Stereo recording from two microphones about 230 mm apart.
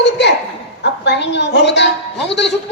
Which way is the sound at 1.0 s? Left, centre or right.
Left.